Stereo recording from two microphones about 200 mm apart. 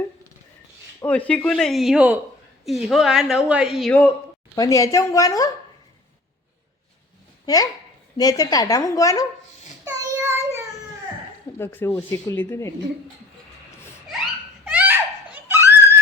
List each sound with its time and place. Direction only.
1.0 s a woman's voice: 5° left (ahead or behind)
4.5 s speech: 15° left (ahead or behind)
7.4 s speech: 20° left (ahead or behind)
9.8 s child singing: 15° right (ahead or behind)
11.5 s speech: 10° left (ahead or behind)
14.6 s giggle: 5° right (ahead or behind)